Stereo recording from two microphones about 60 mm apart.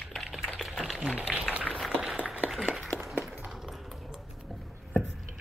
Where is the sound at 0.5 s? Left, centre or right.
Centre.